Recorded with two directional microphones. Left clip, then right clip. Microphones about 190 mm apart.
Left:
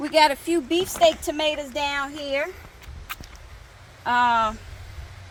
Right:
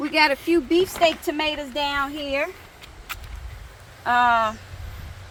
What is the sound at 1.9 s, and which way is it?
Speech, 15° left (ahead or behind).